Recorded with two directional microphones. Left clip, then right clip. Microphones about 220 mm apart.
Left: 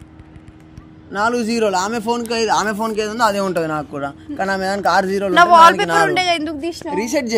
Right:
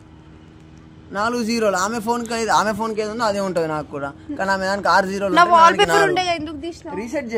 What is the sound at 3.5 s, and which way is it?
A woman's voice, 10° left (ahead or behind).